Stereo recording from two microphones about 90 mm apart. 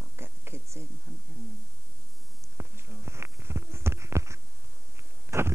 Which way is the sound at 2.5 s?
25° right (ahead or behind).